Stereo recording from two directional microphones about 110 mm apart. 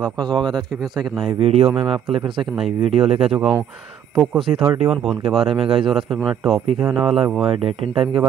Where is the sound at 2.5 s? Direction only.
Centre (ahead or behind).